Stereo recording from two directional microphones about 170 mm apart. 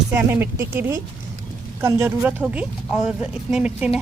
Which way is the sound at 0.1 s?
10° right (ahead or behind).